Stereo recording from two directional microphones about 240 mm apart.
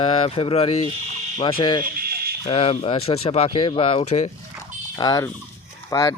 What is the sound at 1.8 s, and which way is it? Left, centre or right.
Buzzer, right.